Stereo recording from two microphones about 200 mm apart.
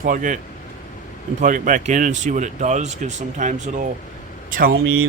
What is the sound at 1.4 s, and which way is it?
Speech, 40° right (ahead or behind).